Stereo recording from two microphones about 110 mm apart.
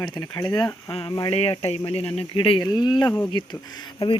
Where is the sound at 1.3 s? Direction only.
65° left (ahead or behind).